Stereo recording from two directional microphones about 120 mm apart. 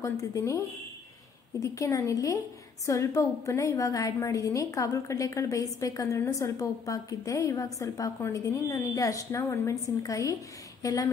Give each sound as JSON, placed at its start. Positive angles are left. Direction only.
{"t": 0.0, "sound": "a woman's voice", "side_deg": 25}